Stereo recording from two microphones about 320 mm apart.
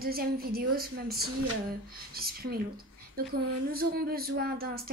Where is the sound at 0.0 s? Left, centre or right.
Right.